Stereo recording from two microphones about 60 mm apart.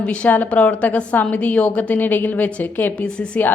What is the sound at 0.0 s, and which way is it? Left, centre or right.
A woman's voice, left.